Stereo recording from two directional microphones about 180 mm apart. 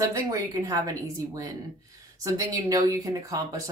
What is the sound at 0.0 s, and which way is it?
Speech, 20° right (ahead or behind).